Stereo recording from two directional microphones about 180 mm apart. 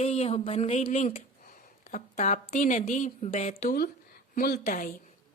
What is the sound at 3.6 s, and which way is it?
A woman's voice, 60° left (ahead or behind).